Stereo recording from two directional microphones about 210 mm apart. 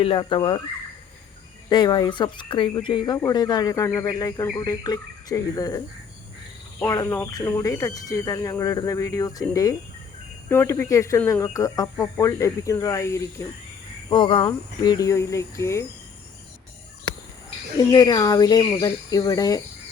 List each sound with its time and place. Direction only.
0.0 s speech: 25° left (ahead or behind)
1.7 s speech: 20° left (ahead or behind)
17.7 s speech: 20° left (ahead or behind)